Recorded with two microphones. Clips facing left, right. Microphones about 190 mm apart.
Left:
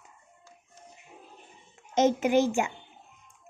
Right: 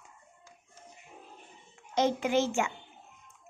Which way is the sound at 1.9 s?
20° left (ahead or behind).